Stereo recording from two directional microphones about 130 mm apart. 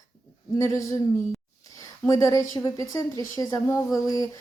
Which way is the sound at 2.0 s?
25° left (ahead or behind).